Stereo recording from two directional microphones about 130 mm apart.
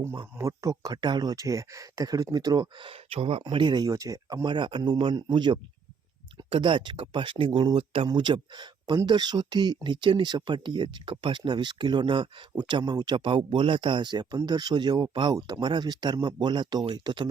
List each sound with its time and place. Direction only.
0.2 s speech: 25° right (ahead or behind); by 3.4 s 50° right (ahead or behind)
3.4 s speech: 35° right (ahead or behind)